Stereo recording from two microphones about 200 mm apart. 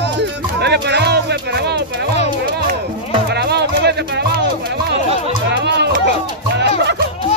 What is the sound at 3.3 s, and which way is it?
Music, 55° right (ahead or behind).